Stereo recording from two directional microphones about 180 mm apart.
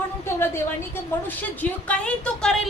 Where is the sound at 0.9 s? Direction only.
10° left (ahead or behind).